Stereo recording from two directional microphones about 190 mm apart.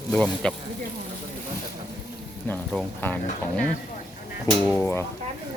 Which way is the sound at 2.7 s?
5° left (ahead or behind).